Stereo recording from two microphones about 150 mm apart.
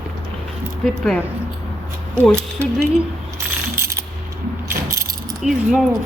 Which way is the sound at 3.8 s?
20° right (ahead or behind).